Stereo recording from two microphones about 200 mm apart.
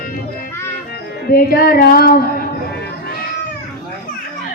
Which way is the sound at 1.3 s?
50° left (ahead or behind).